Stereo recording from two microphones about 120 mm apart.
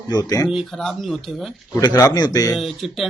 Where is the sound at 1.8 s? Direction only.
30° left (ahead or behind).